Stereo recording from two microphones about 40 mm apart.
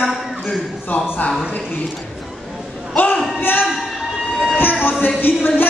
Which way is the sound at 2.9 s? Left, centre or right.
Left.